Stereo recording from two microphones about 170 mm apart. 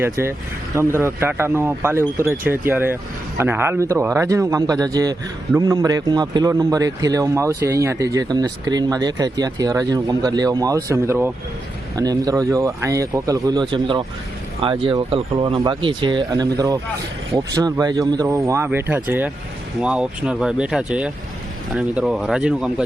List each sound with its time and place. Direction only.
0.0 s a man's voice: 15° right (ahead or behind)